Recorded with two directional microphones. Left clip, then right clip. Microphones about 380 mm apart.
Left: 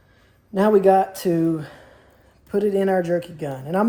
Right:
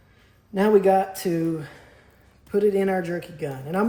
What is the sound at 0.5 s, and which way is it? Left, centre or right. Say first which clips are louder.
Speech: left 3 dB; centre.